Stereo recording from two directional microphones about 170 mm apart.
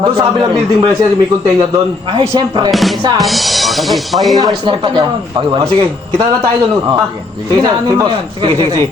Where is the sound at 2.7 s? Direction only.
Centre (ahead or behind).